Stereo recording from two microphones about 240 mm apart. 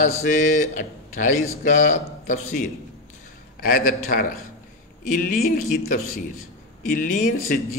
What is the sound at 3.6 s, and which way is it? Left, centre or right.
Mantra, left.